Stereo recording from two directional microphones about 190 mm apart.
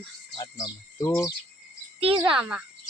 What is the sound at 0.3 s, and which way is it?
Speech, 20° left (ahead or behind).